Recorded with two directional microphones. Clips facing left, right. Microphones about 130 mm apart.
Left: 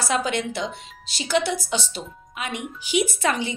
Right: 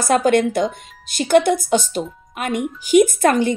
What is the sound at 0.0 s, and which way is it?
Speech, 50° right (ahead or behind).